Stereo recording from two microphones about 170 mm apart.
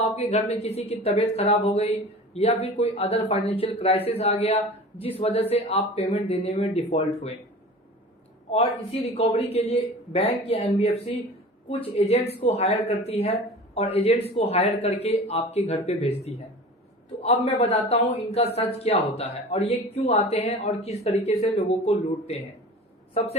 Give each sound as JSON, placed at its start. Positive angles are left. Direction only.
{"t": 0.0, "sound": "speech", "side_deg": 40}
{"t": 8.4, "sound": "speech", "side_deg": 40}